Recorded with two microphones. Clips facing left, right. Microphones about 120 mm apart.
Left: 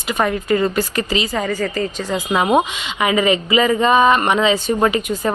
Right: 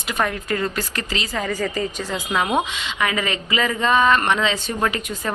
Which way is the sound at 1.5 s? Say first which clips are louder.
Left 3 dB; 5° right (ahead or behind).